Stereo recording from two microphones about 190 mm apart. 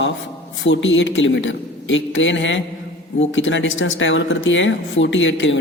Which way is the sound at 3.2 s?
85° left.